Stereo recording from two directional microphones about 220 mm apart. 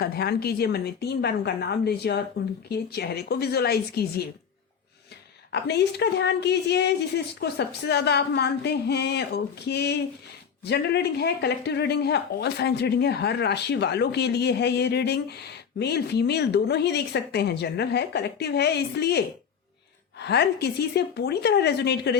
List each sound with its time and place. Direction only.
0.0 s speech: 45° left (ahead or behind)
5.5 s speech: 50° left (ahead or behind)